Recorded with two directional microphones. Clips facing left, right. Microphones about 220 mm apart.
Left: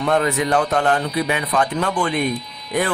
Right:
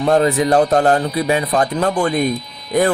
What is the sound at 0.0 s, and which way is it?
Speech, 35° right (ahead or behind).